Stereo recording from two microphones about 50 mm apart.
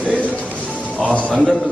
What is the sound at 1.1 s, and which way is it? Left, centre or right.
Speech, left.